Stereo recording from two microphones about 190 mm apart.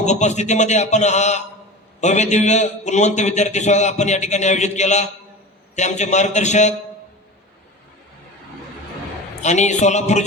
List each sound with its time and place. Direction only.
0.0 s a man's voice: 40° left (ahead or behind)
9.4 s a man's voice: 40° left (ahead or behind)